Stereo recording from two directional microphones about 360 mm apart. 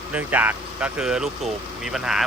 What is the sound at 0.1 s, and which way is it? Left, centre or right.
Speech, centre.